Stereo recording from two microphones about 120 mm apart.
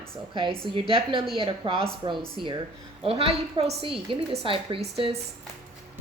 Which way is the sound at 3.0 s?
55° right (ahead or behind).